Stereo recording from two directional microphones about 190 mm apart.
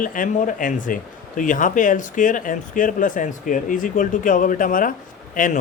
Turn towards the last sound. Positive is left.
turn(degrees=45)  # may be behind; listen again after turning